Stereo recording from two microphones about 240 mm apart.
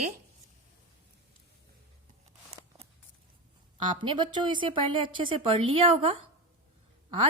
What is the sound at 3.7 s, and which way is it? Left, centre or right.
A woman's voice, centre.